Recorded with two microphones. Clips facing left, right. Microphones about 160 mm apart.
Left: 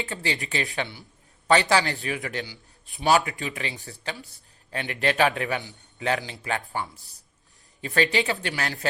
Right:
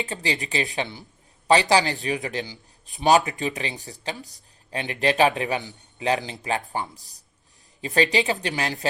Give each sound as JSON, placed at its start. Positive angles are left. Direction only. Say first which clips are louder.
{"t": 0.0, "sound": "a man's voice", "louder": "right 2 dB", "side_deg": -20}
{"t": 4.2, "sound": "speech", "louder": "right 3 dB", "side_deg": -40}
{"t": 4.7, "sound": "a man's voice", "louder": "right 2 dB", "side_deg": -20}